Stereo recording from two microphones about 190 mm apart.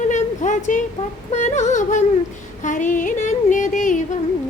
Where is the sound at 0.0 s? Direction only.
40° left (ahead or behind).